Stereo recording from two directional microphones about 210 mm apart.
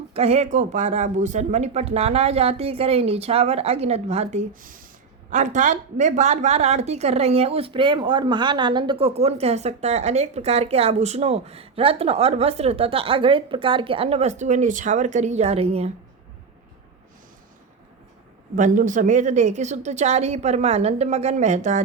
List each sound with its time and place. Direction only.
0.1 s a woman's voice: 30° right (ahead or behind)
18.5 s a woman's voice: 40° right (ahead or behind)